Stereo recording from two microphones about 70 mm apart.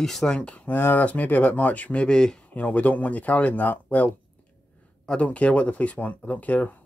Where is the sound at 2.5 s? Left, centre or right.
Left.